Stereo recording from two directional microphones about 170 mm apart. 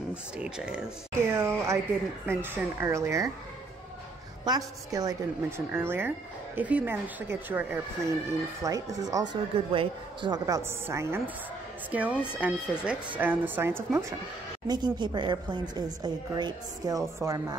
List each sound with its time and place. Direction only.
0.4 s speech: 5° right (ahead or behind)
4.5 s speech: 20° right (ahead or behind)
14.7 s speech: 25° right (ahead or behind)